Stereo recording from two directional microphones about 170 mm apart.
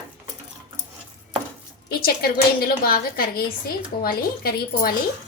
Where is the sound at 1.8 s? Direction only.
65° left (ahead or behind).